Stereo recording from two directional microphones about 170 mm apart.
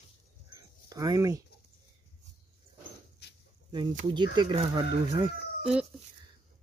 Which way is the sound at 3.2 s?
75° left (ahead or behind).